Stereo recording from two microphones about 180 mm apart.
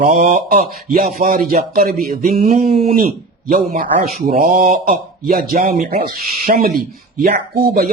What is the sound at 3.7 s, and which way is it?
Speech, 55° right (ahead or behind).